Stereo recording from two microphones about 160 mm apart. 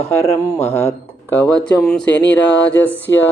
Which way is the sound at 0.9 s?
10° left (ahead or behind).